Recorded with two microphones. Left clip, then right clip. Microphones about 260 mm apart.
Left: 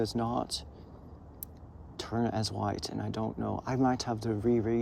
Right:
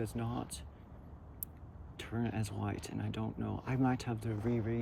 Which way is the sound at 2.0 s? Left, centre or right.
Centre.